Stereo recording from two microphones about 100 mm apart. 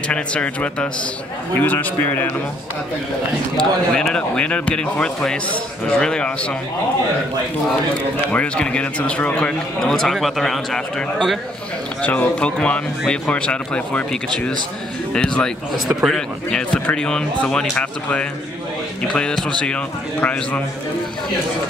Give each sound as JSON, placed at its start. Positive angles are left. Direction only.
{"t": 0.1, "sound": "a man's voice", "side_deg": 10}
{"t": 3.5, "sound": "a man's voice", "side_deg": 5}
{"t": 8.3, "sound": "a man's voice", "side_deg": 10}
{"t": 12.0, "sound": "a man's voice", "side_deg": 10}